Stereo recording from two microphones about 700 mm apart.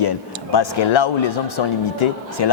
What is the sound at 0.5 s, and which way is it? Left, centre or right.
Speech, left.